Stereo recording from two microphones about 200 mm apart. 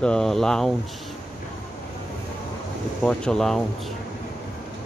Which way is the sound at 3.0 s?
5° left (ahead or behind).